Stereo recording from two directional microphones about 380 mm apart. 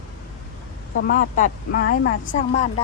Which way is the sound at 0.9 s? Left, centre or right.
Left.